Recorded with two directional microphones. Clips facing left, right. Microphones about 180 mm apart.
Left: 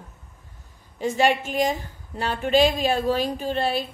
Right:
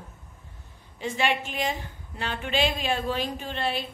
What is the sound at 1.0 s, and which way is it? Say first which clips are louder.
A woman's voice: left 6 dB; 45° left (ahead or behind).